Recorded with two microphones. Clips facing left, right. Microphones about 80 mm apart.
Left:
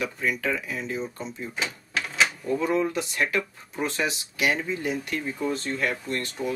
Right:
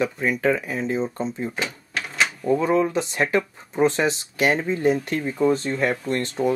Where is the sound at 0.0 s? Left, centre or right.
Right.